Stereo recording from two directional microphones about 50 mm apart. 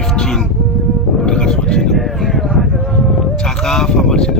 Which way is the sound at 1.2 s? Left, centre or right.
Centre.